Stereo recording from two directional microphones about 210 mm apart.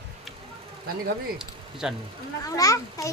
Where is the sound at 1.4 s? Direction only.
5° right (ahead or behind).